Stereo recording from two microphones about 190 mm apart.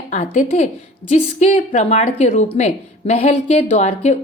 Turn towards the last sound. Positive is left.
turn(degrees=35)  # may be behind; listen again after turning